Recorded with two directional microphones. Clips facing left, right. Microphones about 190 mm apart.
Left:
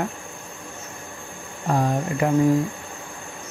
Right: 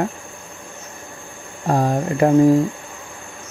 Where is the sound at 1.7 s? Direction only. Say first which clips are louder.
Right 4 dB; 35° right (ahead or behind).